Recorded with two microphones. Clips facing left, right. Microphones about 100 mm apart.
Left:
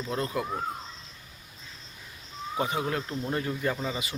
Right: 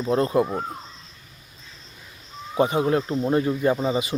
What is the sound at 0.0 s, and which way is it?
Speech, 35° right (ahead or behind).